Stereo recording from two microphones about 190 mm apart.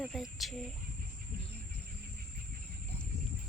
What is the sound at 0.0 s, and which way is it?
Speech, centre (ahead or behind).